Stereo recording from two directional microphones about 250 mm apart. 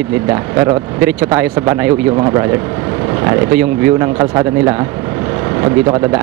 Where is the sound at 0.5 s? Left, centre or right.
Centre.